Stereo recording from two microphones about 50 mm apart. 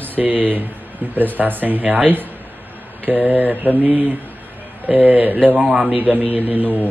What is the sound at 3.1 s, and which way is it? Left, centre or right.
Speech, right.